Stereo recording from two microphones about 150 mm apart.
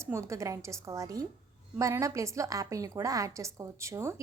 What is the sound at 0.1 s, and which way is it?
A woman's voice, 20° right (ahead or behind).